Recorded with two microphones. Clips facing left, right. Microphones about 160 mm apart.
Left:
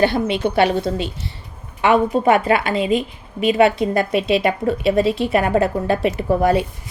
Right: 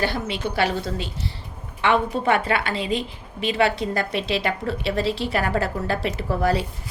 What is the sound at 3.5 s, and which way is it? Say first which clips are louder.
A woman's voice: left 6 dB; 20° left (ahead or behind).